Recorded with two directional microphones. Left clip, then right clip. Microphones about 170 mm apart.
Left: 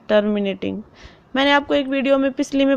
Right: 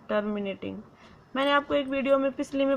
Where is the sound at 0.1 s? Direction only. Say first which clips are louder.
Left 11 dB; 45° left (ahead or behind).